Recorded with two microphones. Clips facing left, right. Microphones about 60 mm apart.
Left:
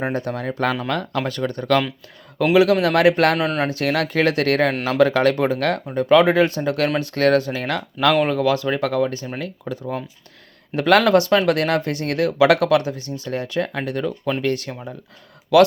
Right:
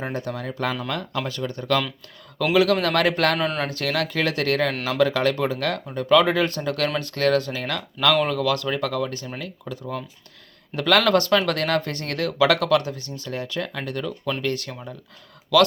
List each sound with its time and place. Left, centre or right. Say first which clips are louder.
0.0 s speech: left 5 dB; left
2.4 s speech: left 4 dB; left
3.3 s speech: left 3 dB; centre
3.7 s speech: left 4 dB; left
7.2 s speech: left 4 dB; left
8.1 s speech: left 3 dB; left